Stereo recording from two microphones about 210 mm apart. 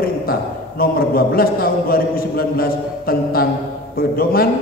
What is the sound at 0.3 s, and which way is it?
A man's voice, 45° left (ahead or behind).